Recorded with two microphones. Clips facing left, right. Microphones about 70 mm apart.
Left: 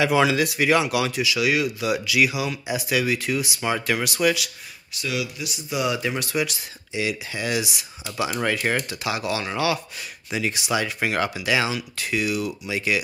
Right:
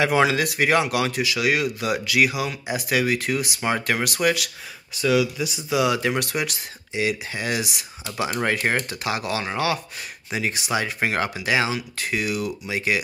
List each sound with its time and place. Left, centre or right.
0.0 s speech: right
5.7 s speech: right